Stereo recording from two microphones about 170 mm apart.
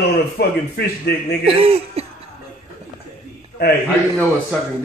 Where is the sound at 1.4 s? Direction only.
35° right (ahead or behind).